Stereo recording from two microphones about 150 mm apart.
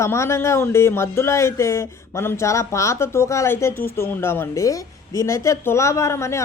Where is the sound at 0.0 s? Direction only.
20° left (ahead or behind).